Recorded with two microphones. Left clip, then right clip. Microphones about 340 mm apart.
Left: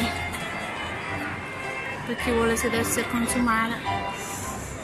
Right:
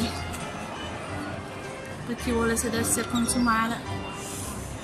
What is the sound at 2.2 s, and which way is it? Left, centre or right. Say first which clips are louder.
Speech: left 3 dB; centre.